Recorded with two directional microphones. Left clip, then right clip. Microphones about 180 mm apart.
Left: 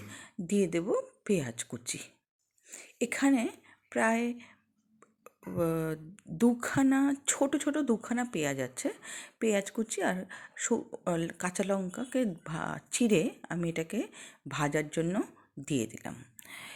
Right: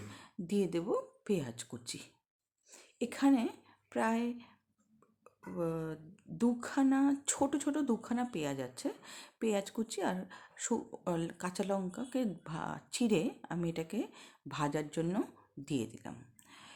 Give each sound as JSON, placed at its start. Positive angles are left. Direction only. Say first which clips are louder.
{"t": 0.1, "sound": "speech", "louder": "left 5 dB", "side_deg": 15}